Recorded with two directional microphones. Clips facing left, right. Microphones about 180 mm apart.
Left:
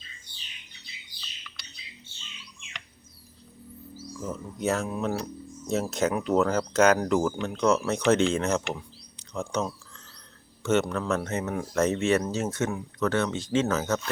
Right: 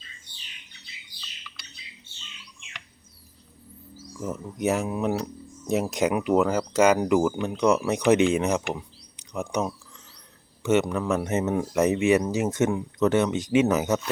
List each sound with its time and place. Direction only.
4.2 s speech: 15° right (ahead or behind)
8.7 s a sound: 15° right (ahead or behind)
10.6 s speech: 15° right (ahead or behind)